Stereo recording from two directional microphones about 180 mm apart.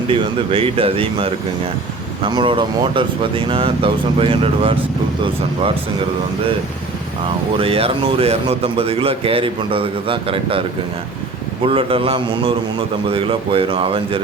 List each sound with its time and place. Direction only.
0.1 s speech: 30° right (ahead or behind)
7.5 s speech: 30° right (ahead or behind)
11.6 s speech: 30° right (ahead or behind)